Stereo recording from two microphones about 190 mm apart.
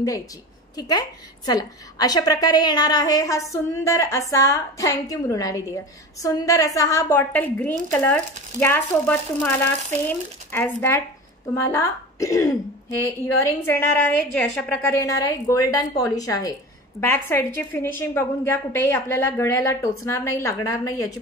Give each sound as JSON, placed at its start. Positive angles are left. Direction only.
{"t": 0.7, "sound": "a woman's voice", "side_deg": 20}